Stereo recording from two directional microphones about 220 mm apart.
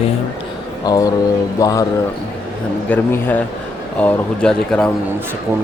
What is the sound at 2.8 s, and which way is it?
Speech, 10° left (ahead or behind).